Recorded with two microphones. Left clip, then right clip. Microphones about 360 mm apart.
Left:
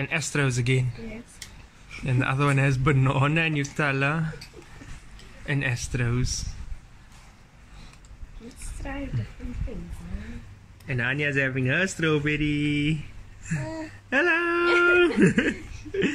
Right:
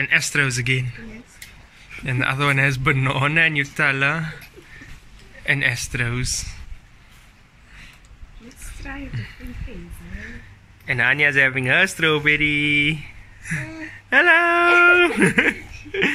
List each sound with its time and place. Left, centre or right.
0.0 s speech: centre
2.0 s a man's voice: centre
5.4 s a man's voice: centre
10.9 s a man's voice: centre
14.1 s a man's voice: centre
15.1 s chuckle: centre